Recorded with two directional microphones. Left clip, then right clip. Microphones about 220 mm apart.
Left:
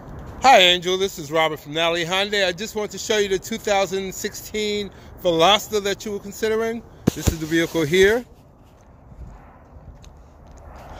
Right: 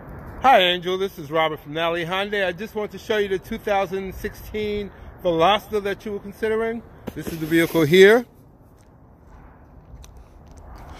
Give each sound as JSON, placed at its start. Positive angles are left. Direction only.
{"t": 0.4, "sound": "speech", "side_deg": 5}
{"t": 7.4, "sound": "speech", "side_deg": -30}